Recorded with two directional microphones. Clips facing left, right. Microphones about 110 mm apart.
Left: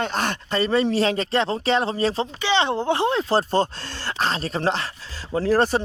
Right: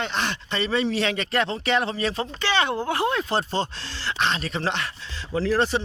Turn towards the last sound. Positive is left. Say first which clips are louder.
# left 3 dB
turn(degrees=45)  # may be behind; listen again after turning